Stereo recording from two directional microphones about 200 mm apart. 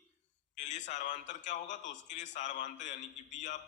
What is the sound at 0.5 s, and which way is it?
A man's voice, 40° left (ahead or behind).